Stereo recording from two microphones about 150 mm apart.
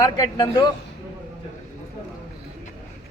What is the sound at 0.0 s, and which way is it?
Speech, 25° left (ahead or behind).